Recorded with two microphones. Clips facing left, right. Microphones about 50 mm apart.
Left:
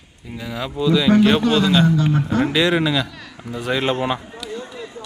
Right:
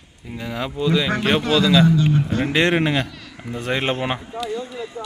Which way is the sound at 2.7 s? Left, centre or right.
Right.